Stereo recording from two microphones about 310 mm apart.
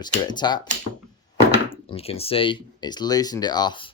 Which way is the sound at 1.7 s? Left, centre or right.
Centre.